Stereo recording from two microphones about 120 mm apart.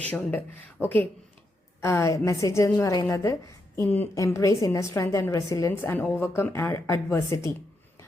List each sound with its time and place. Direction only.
0.0 s a woman's voice: 15° left (ahead or behind); by 3.3 s 30° left (ahead or behind)
3.8 s a woman's voice: 20° left (ahead or behind)